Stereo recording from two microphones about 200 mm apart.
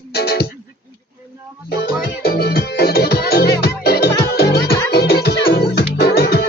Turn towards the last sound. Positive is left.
turn(degrees=50)  # may be behind; listen again after turning